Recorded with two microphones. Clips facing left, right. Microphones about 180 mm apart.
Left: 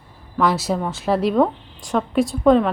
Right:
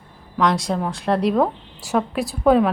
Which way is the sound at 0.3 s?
5° left (ahead or behind).